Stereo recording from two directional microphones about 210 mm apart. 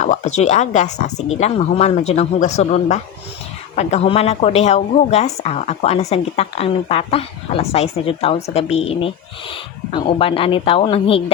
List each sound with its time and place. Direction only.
0.0 s speech: 35° left (ahead or behind)